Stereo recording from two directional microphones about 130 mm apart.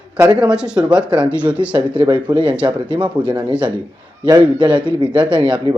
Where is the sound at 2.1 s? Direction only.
40° right (ahead or behind).